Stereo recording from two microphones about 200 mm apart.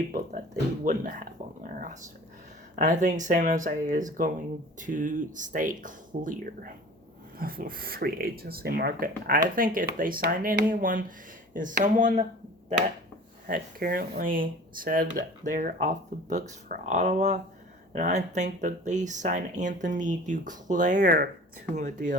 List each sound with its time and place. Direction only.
0.9 s speech: 40° right (ahead or behind)
2.7 s speech: 40° right (ahead or behind)
13.5 s speech: 45° right (ahead or behind)